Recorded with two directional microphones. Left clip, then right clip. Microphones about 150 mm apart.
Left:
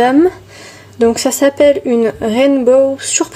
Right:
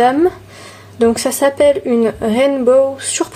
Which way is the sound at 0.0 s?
10° left (ahead or behind).